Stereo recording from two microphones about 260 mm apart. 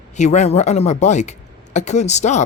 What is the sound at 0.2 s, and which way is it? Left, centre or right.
Speech, left.